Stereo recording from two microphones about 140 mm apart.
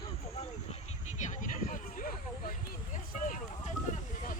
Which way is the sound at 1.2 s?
60° left (ahead or behind).